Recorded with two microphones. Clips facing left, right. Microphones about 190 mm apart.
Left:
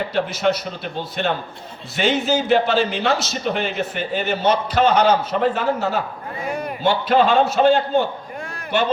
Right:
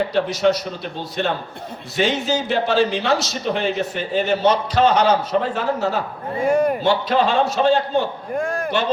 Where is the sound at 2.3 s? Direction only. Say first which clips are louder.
Left 3 dB; 60° left (ahead or behind).